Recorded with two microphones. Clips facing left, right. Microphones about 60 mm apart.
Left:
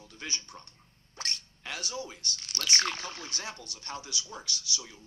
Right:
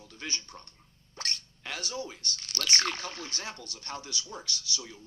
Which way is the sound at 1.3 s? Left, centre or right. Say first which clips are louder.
Right 1 dB; right.